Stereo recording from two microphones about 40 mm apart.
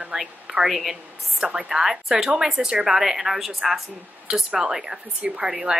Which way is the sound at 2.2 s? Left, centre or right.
Centre.